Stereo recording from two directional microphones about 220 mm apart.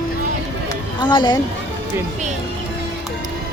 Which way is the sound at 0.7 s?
20° left (ahead or behind).